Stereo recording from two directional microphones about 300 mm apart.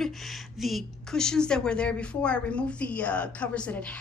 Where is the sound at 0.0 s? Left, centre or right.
Centre.